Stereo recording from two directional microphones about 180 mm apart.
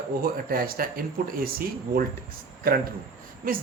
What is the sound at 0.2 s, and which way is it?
A man's voice, 55° right (ahead or behind).